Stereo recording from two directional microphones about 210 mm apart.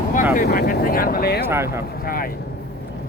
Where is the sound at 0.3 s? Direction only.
50° left (ahead or behind).